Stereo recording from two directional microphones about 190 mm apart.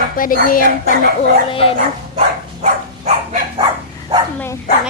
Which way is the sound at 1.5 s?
30° left (ahead or behind).